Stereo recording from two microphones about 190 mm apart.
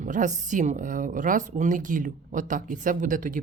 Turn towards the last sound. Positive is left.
turn(degrees=-45)  # may be behind; listen again after turning